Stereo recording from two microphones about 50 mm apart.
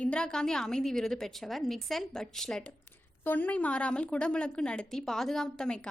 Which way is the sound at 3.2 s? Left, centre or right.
Left.